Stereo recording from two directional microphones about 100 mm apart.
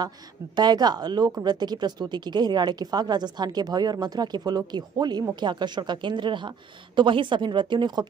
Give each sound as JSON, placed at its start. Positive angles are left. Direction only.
{"t": 0.6, "sound": "speech", "side_deg": -45}